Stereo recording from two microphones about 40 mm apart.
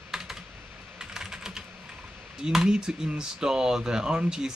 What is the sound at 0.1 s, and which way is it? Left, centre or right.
Computer keyboard, centre.